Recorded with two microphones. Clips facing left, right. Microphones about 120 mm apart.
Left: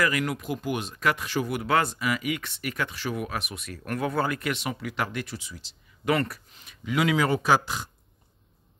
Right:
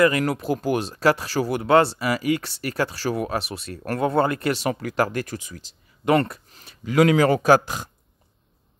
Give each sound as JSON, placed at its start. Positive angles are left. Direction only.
{"t": 0.2, "sound": "speech", "side_deg": -35}
{"t": 6.0, "sound": "speech", "side_deg": -25}